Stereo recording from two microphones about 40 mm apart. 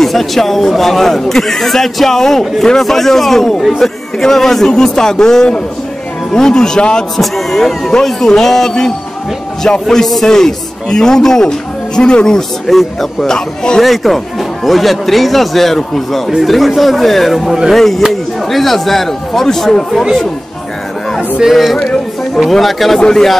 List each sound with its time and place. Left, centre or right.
0.0 s speech: centre
7.2 s speech: centre; by 12.4 s left
12.6 s speech: centre
21.5 s speech: centre
22.9 s speech: centre